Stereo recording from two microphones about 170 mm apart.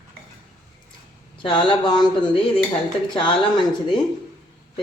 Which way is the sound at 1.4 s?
30° left (ahead or behind).